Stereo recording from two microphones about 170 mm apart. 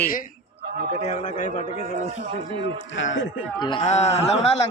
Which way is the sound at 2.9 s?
90° left.